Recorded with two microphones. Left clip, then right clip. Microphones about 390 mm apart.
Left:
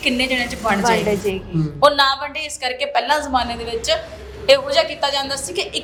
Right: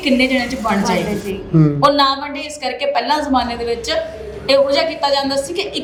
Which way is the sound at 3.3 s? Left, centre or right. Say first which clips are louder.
Right 3 dB; left.